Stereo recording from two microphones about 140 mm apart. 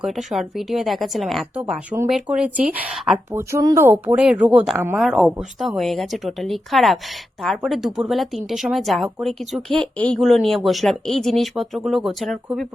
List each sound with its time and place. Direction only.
0.0 s speech: centre (ahead or behind)
3.3 s speech: 25° right (ahead or behind)
3.8 s a woman's voice: 10° right (ahead or behind)